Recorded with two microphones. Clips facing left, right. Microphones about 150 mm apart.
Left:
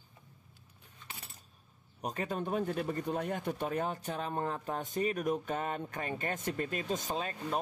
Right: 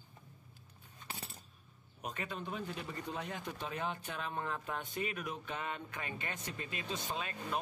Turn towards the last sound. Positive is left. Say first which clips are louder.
# left 4 dB
turn(degrees=40)  # may be behind; listen again after turning